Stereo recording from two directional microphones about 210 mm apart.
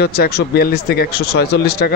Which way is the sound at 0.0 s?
45° left (ahead or behind).